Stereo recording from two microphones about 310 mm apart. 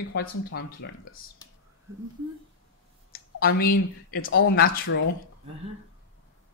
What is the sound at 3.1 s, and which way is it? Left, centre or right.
Speech, left.